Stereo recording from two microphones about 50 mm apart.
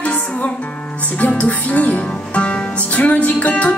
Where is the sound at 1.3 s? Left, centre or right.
Left.